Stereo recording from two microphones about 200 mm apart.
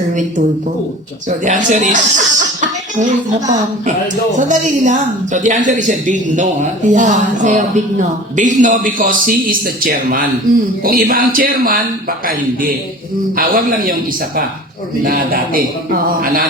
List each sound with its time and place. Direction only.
0.1 s speech: 40° right (ahead or behind)
1.5 s a man's voice: 40° right (ahead or behind)
15.0 s a man's voice: 45° right (ahead or behind)